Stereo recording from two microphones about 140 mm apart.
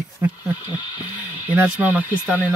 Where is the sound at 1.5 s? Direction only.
10° right (ahead or behind).